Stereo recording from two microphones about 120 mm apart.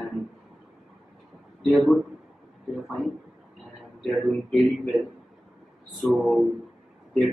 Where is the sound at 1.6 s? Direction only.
Centre (ahead or behind).